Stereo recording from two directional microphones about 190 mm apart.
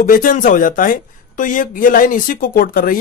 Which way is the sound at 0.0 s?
45° left (ahead or behind).